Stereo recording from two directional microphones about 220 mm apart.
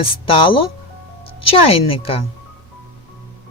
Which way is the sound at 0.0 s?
25° left (ahead or behind).